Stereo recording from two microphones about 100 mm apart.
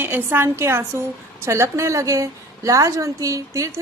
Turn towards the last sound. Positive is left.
turn(degrees=-30)  # may be behind; listen again after turning